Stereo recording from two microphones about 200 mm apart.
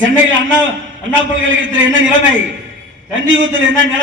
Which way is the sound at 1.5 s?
70° right (ahead or behind).